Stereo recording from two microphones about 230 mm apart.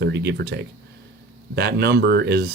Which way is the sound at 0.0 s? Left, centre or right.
Right.